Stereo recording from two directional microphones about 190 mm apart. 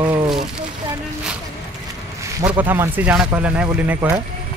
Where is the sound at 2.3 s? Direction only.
10° right (ahead or behind).